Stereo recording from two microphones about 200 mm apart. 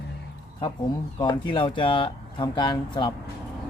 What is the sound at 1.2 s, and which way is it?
Speech, 25° left (ahead or behind).